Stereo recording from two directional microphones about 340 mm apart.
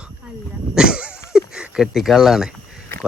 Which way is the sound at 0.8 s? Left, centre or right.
Centre.